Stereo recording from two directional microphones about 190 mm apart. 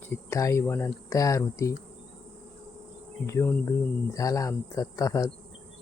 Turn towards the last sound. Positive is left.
turn(degrees=15)  # may be behind; listen again after turning